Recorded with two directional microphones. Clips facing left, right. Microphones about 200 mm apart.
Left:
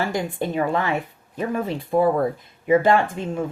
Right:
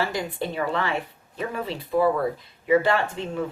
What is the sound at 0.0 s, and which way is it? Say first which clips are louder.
Speech: left 3 dB; 50° left (ahead or behind).